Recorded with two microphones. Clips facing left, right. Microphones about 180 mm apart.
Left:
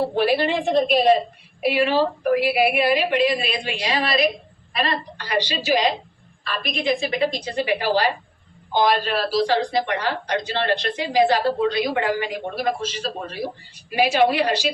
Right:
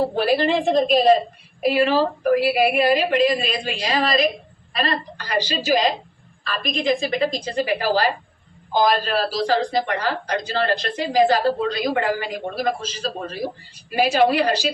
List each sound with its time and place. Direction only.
0.2 s speech: 40° right (ahead or behind)